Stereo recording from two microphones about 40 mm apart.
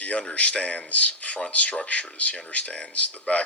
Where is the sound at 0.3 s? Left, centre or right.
Left.